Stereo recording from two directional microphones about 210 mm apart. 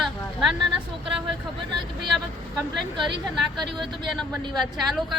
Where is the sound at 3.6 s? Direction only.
20° right (ahead or behind).